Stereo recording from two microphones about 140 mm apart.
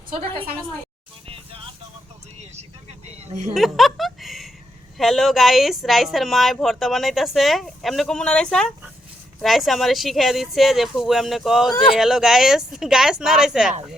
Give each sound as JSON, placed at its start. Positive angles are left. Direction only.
{"t": 0.1, "sound": "a woman's voice", "side_deg": -40}
{"t": 3.5, "sound": "speech", "side_deg": 0}